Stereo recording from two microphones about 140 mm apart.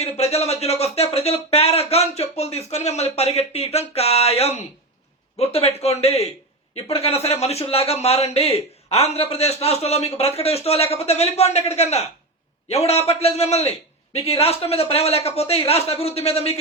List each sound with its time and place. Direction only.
0.0 s a man's voice: 50° left (ahead or behind)